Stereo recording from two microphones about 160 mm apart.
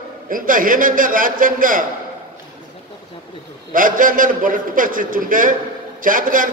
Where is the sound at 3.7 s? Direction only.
60° right (ahead or behind).